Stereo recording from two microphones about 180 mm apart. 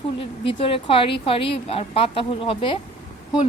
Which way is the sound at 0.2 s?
30° left (ahead or behind).